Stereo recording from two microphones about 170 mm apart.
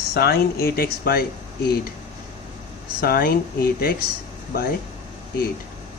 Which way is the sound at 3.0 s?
60° left (ahead or behind).